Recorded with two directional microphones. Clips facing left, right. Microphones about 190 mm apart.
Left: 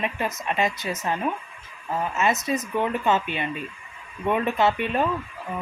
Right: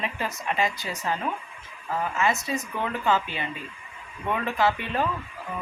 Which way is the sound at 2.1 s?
20° left (ahead or behind).